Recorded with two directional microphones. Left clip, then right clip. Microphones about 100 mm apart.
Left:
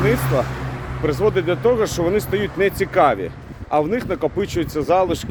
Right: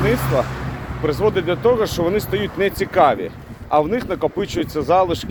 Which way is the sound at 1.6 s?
30° left (ahead or behind).